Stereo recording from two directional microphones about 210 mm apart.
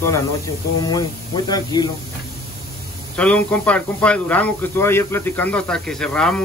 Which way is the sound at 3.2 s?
5° left (ahead or behind).